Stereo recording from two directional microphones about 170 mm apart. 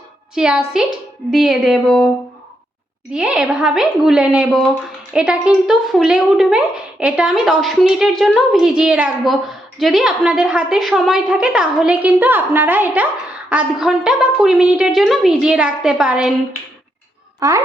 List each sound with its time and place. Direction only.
0.3 s a woman's voice: 5° right (ahead or behind)
3.1 s a woman's voice: 5° right (ahead or behind)
17.4 s speech: 20° right (ahead or behind)